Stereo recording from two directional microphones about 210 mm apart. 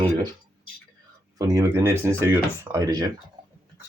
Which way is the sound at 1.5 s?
15° right (ahead or behind).